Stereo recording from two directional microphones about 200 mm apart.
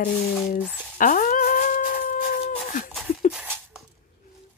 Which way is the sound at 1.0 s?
40° left (ahead or behind).